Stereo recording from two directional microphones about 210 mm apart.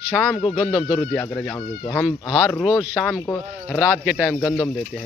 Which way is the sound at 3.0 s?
15° left (ahead or behind).